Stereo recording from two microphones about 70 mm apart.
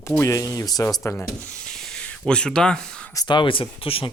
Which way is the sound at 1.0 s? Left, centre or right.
Left.